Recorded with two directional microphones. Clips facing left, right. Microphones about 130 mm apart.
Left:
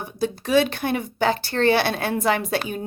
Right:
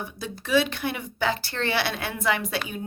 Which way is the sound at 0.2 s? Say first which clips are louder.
Left 5 dB; 40° left (ahead or behind).